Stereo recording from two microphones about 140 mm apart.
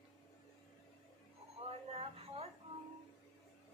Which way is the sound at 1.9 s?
45° right (ahead or behind).